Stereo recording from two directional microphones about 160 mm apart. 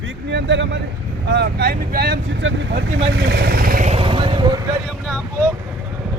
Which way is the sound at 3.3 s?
80° right.